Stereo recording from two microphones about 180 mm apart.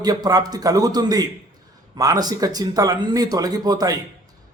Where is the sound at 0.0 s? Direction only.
20° right (ahead or behind).